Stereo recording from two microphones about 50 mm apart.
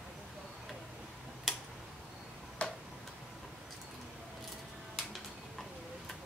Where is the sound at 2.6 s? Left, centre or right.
Centre.